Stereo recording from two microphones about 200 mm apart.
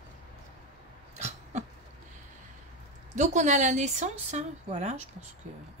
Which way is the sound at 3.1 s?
35° right (ahead or behind).